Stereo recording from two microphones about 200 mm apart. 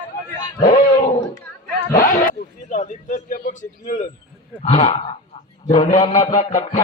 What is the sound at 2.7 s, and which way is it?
A man's voice, 40° left (ahead or behind).